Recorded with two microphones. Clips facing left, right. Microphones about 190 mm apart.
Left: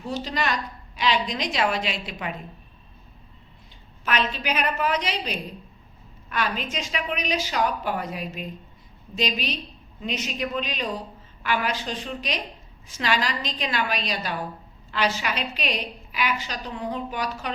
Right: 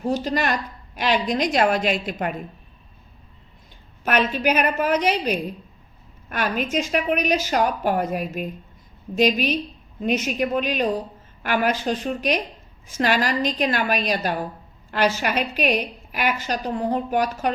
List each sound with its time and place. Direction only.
0.0 s a woman's voice: 50° right (ahead or behind)
4.0 s a woman's voice: 50° right (ahead or behind)